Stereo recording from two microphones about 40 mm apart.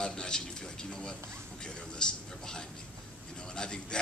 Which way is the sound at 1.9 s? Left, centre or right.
Centre.